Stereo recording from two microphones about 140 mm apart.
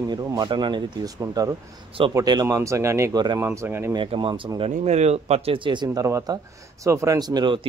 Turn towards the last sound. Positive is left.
turn(degrees=-35)  # may be behind; listen again after turning